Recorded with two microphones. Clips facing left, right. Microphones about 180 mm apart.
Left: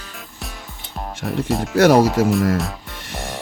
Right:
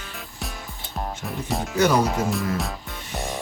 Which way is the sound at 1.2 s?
80° left.